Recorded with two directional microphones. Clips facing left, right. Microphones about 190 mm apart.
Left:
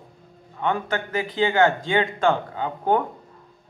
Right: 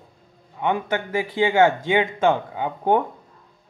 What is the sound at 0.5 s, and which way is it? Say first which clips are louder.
Speech: right 2 dB; 15° right (ahead or behind).